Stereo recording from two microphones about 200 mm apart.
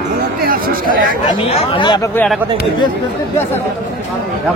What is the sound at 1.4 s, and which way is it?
Speech, 30° left (ahead or behind).